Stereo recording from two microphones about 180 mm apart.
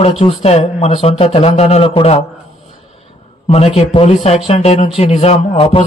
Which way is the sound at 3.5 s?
35° left (ahead or behind).